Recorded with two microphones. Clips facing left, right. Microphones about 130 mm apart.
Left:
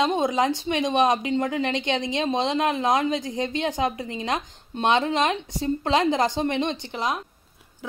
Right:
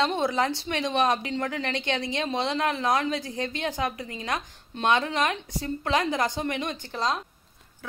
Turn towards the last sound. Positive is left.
turn(degrees=15)  # may be behind; listen again after turning